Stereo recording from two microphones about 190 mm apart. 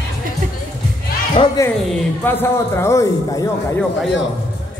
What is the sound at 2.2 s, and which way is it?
A man's voice, 10° left (ahead or behind).